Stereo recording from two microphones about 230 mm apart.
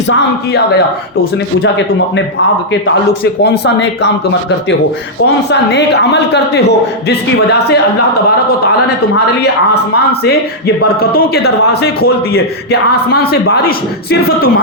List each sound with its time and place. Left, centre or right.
3.4 s speech: left
5.5 s speech: left
10.8 s speech: left